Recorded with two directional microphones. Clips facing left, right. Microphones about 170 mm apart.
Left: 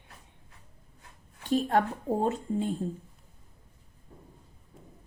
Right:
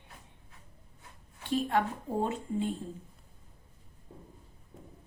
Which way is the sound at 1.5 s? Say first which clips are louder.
Left 4 dB; 45° left (ahead or behind).